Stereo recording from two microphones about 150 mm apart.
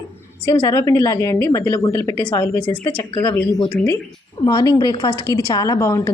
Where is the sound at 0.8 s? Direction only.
20° left (ahead or behind).